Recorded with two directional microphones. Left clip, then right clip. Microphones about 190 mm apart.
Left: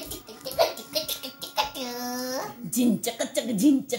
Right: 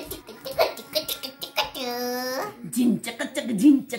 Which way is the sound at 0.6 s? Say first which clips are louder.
Right 1 dB; 20° right (ahead or behind).